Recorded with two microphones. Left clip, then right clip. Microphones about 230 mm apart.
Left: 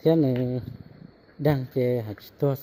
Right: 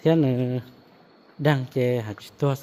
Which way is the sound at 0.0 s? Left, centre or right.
Centre.